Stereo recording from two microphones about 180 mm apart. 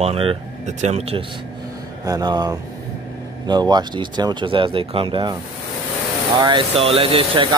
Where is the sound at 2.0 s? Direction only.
20° right (ahead or behind).